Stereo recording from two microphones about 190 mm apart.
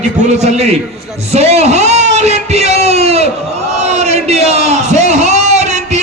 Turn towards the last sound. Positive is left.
turn(degrees=-35)  # may be behind; listen again after turning